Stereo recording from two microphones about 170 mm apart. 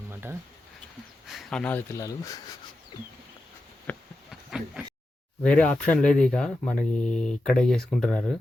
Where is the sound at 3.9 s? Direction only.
10° left (ahead or behind).